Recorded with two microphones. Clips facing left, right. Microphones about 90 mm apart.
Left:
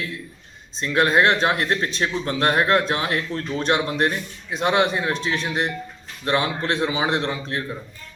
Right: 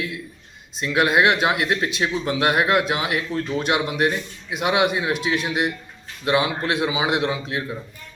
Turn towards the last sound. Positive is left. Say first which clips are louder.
# right 1 dB
turn(degrees=-10)  # may be behind; listen again after turning